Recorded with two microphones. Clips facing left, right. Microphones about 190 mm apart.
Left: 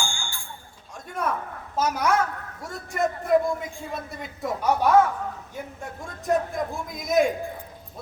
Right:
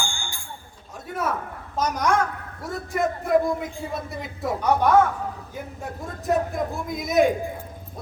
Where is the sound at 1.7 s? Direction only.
5° left (ahead or behind).